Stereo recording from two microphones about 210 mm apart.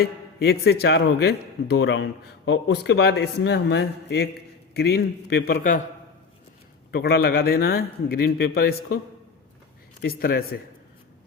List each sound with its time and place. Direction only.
0.0 s a man's voice: 50° left (ahead or behind)
6.9 s a man's voice: 50° left (ahead or behind)
10.0 s a man's voice: 45° left (ahead or behind)